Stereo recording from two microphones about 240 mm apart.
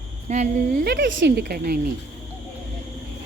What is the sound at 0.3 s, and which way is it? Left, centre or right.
Speech, right.